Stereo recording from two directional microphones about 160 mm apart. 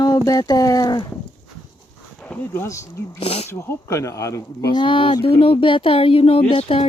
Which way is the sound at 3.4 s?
15° left (ahead or behind).